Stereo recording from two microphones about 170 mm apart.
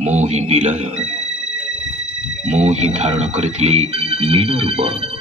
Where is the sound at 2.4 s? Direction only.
40° right (ahead or behind).